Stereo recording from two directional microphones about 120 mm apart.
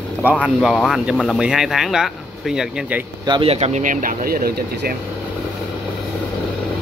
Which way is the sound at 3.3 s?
55° right (ahead or behind).